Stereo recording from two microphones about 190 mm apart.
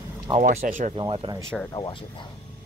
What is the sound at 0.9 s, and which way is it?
Speech, 30° right (ahead or behind).